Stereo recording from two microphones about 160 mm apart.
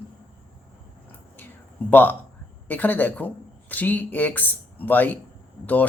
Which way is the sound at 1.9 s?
10° left (ahead or behind).